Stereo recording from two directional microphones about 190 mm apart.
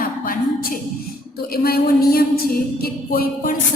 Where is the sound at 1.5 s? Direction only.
55° left (ahead or behind).